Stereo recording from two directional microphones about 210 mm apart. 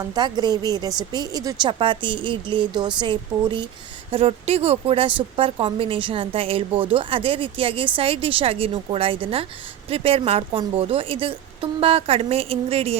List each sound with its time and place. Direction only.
0.0 s a woman's voice: 20° right (ahead or behind)